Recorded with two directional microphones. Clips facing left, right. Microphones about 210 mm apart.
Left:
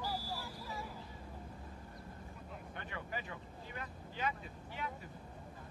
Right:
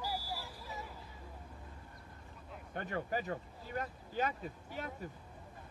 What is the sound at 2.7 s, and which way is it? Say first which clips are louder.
Speech: right 8 dB; 45° right (ahead or behind).